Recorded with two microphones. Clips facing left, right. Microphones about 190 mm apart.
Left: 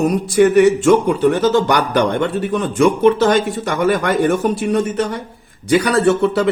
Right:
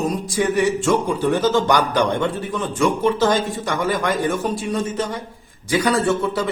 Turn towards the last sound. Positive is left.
turn(degrees=65)  # may be behind; listen again after turning